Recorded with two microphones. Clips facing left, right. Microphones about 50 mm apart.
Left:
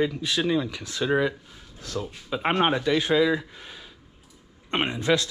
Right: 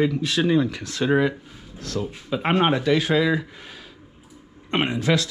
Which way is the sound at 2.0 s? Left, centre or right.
Centre.